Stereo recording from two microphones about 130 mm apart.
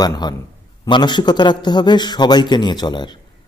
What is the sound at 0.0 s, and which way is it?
A man's voice, 30° left (ahead or behind).